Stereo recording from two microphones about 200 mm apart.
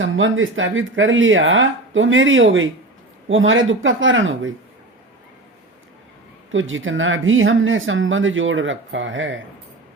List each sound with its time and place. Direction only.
0.0 s speech: 75° right (ahead or behind)
6.5 s speech: 75° right (ahead or behind)